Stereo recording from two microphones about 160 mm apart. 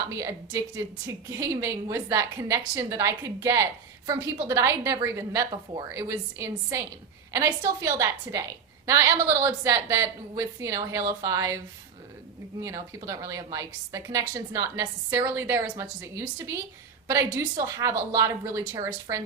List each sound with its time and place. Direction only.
0.1 s a woman's voice: 20° right (ahead or behind)
12.6 s a woman's voice: 20° right (ahead or behind)